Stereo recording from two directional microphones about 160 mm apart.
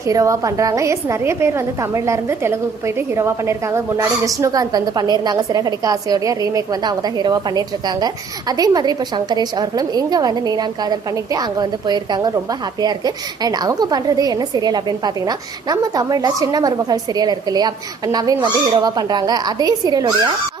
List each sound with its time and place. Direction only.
0.1 s a woman's voice: 20° right (ahead or behind)